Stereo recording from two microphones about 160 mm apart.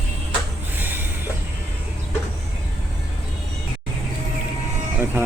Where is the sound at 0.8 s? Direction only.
10° right (ahead or behind).